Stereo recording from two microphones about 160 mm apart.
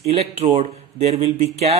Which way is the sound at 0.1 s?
40° right (ahead or behind).